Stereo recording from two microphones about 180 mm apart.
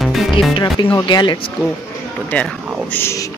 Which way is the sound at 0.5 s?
25° left (ahead or behind).